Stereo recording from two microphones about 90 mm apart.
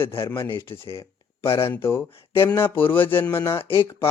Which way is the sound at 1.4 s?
90° left.